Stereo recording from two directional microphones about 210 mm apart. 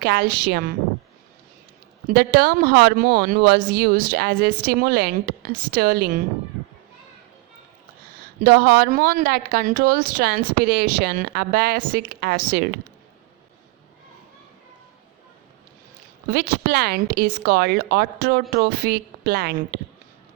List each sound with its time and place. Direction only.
0.0 s speech: 50° right (ahead or behind)
2.1 s speech: 50° right (ahead or behind)
8.4 s speech: 45° right (ahead or behind)
16.3 s speech: 45° right (ahead or behind)